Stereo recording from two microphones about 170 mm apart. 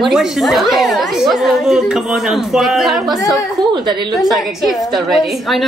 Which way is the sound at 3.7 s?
25° right (ahead or behind).